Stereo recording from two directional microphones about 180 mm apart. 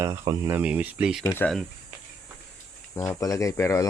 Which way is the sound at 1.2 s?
10° left (ahead or behind).